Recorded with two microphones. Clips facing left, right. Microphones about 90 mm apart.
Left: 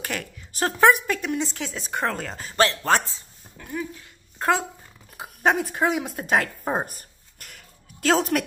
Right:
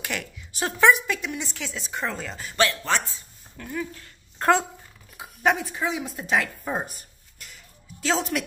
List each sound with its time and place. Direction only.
0.0 s a woman's voice: 35° left (ahead or behind)
1.9 s speech: 55° left (ahead or behind)
2.3 s a woman's voice: 40° left (ahead or behind)
3.2 s dog: 15° left (ahead or behind)
4.4 s speech: 5° left (ahead or behind)
5.1 s speech: 40° left (ahead or behind)